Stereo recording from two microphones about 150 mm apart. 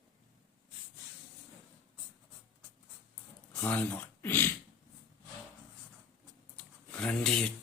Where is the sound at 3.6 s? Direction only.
10° left (ahead or behind).